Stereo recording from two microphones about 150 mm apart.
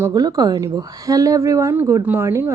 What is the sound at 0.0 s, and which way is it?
A woman's voice, 25° right (ahead or behind).